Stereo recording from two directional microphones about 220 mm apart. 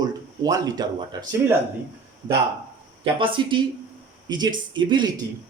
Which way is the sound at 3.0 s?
25° right (ahead or behind).